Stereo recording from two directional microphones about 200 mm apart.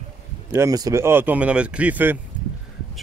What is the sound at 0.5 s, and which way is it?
Speech, 15° right (ahead or behind).